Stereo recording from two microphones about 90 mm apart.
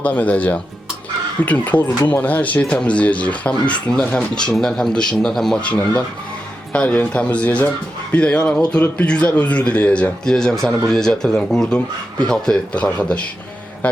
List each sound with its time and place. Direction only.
0.0 s a man's voice: 15° left (ahead or behind)